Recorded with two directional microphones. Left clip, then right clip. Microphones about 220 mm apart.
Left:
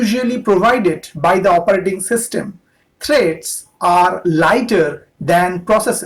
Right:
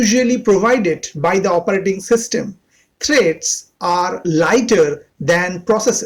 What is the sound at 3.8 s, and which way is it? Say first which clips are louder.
Speech: left 5 dB; 30° right (ahead or behind).